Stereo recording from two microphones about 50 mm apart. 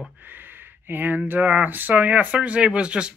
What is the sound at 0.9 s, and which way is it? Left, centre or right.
Speech, right.